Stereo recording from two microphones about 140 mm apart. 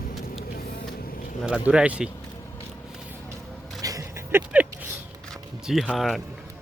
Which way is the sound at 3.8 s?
25° right (ahead or behind).